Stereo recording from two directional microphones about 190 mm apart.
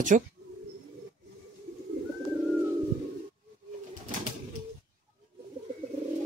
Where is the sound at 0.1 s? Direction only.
40° right (ahead or behind).